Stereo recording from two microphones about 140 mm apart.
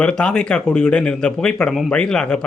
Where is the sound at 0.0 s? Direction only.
5° left (ahead or behind).